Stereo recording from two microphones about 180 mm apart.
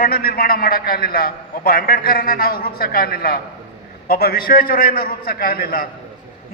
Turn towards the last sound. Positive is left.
turn(degrees=55)  # may be behind; listen again after turning